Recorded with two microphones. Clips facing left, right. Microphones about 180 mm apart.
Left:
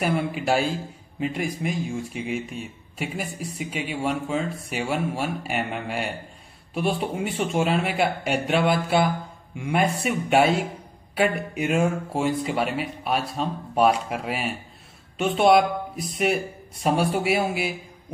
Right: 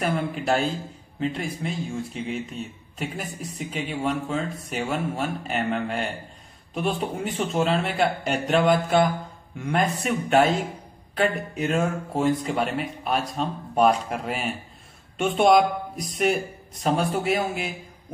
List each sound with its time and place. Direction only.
0.0 s speech: 10° left (ahead or behind)